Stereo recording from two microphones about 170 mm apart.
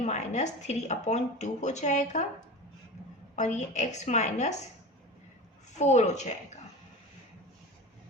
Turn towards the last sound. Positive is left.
turn(degrees=45)  # may be behind; listen again after turning